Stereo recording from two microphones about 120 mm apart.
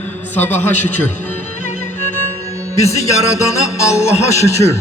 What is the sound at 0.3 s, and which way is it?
Speech, 15° left (ahead or behind).